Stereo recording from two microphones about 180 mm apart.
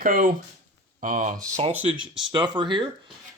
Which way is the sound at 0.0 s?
50° right (ahead or behind).